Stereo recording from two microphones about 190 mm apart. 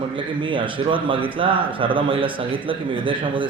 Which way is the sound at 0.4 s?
25° right (ahead or behind).